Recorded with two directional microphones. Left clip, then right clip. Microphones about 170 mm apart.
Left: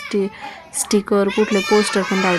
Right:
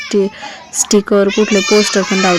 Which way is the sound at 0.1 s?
15° right (ahead or behind).